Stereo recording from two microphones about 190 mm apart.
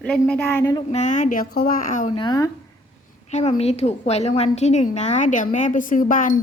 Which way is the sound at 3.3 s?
35° left (ahead or behind).